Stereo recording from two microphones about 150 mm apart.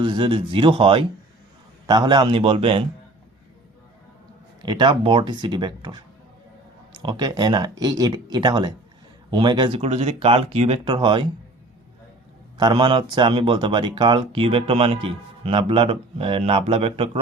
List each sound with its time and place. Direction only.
0.0 s speech: 35° right (ahead or behind)
4.6 s speech: 30° right (ahead or behind)
12.5 s speech: 30° right (ahead or behind)